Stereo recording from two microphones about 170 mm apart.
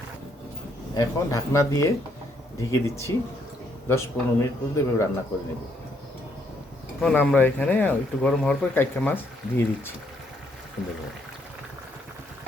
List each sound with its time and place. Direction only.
0.9 s speech: 20° left (ahead or behind)
7.0 s speech: 5° left (ahead or behind)